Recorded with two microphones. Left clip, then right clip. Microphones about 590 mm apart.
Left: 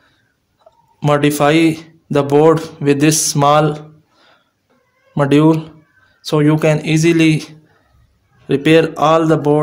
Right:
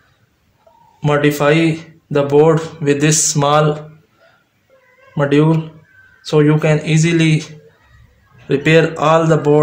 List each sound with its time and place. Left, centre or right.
0.9 s speech: left
5.1 s speech: left